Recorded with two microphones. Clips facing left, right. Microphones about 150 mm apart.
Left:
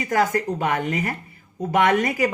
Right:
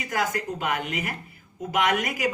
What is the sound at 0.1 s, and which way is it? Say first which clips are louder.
Speech: left 6 dB; 45° left (ahead or behind).